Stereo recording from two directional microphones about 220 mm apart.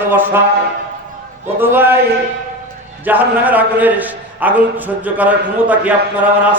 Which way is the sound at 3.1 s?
10° right (ahead or behind).